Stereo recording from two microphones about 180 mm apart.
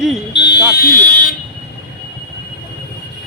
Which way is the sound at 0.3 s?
70° left (ahead or behind).